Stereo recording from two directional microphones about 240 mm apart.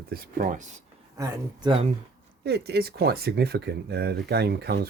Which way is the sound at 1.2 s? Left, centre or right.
Centre.